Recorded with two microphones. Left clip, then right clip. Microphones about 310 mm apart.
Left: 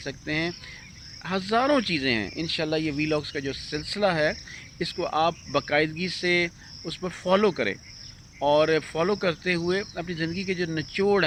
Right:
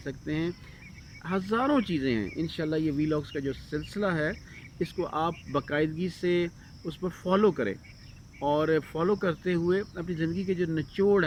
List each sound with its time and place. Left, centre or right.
0.0 s speech: centre